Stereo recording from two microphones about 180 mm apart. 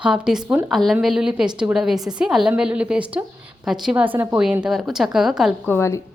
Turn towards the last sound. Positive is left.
turn(degrees=15)  # may be behind; listen again after turning